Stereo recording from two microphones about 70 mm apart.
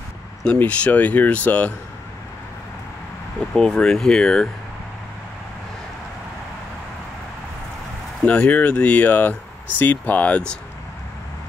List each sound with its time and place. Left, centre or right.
0.6 s speech: left
3.3 s speech: centre
8.2 s speech: centre